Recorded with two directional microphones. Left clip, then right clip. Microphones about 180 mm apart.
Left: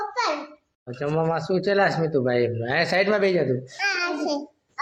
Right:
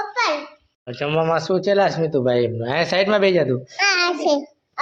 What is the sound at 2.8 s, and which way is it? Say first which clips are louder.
Speech: right 4 dB; 35° right (ahead or behind).